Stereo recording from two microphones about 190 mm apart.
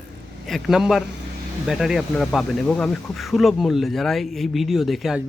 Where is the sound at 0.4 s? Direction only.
Centre (ahead or behind).